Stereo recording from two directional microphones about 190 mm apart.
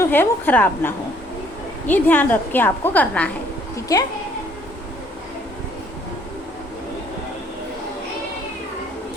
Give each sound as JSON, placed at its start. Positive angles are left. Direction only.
{"t": 0.0, "sound": "a woman's voice", "side_deg": 10}
{"t": 3.9, "sound": "speech", "side_deg": 20}